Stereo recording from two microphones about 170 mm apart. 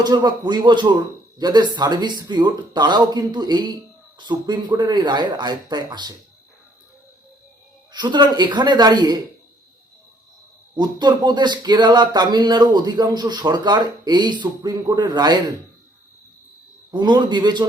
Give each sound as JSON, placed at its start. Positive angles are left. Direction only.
{"t": 0.0, "sound": "speech", "side_deg": -25}
{"t": 7.9, "sound": "speech", "side_deg": -25}
{"t": 10.8, "sound": "speech", "side_deg": -25}
{"t": 16.9, "sound": "speech", "side_deg": -25}